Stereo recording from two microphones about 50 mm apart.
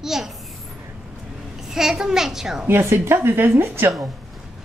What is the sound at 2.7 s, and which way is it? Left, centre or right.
A woman's voice, right.